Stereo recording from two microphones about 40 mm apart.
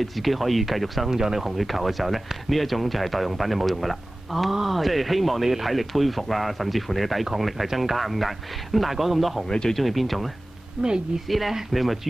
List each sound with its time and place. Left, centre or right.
0.0 s speech: centre
9.5 s speech: centre
9.8 s speech: centre
10.8 s a woman's voice: centre
11.1 s speech: centre